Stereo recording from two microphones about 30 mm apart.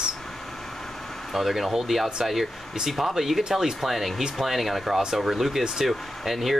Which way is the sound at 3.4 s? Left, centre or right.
Right.